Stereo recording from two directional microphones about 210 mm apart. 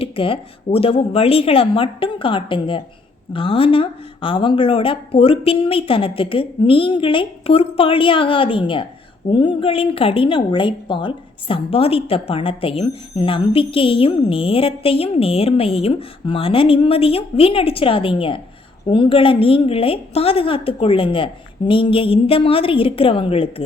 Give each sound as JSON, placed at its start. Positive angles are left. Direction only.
{"t": 0.0, "sound": "a woman's voice", "side_deg": 25}